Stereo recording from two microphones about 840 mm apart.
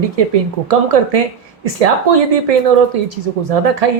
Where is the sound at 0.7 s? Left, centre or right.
Right.